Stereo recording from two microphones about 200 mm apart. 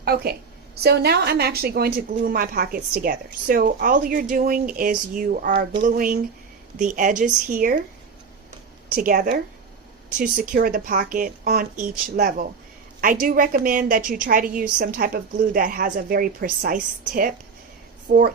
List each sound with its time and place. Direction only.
0.0 s a woman's voice: 50° right (ahead or behind)
9.0 s a woman's voice: 45° right (ahead or behind)